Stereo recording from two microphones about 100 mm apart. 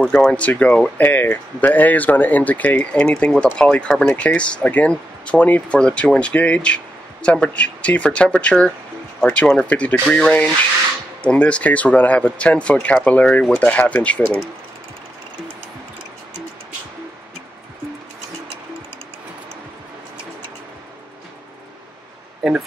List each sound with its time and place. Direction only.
0.0 s speech: 10° left (ahead or behind)
1.0 s speech: 20° left (ahead or behind)